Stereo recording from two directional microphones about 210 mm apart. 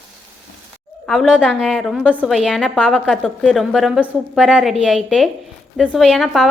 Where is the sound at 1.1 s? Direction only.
5° right (ahead or behind).